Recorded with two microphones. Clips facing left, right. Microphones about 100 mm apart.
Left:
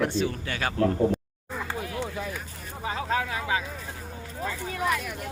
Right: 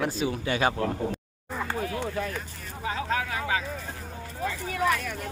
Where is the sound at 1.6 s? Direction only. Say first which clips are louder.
Right 2 dB; 5° left (ahead or behind).